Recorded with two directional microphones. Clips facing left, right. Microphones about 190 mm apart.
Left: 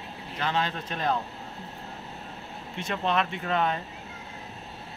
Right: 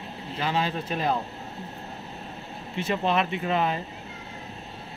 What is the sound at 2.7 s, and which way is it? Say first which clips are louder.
Speech: right 3 dB; 5° right (ahead or behind).